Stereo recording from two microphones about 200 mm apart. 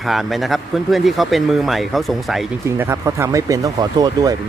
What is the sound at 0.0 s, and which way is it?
Speech, centre (ahead or behind).